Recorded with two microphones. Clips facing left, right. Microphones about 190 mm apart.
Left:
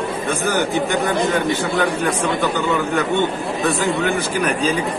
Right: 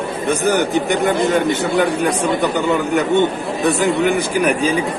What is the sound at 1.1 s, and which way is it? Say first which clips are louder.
Speech: right 2 dB; centre (ahead or behind).